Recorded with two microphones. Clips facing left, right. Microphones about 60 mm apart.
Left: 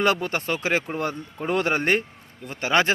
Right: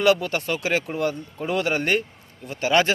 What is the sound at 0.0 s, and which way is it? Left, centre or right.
A man's voice, left.